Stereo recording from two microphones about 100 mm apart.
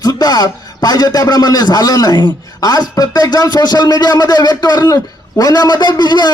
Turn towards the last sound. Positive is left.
turn(degrees=45)  # may be behind; listen again after turning